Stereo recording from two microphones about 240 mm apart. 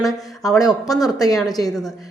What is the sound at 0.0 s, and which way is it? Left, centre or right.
Speech, centre.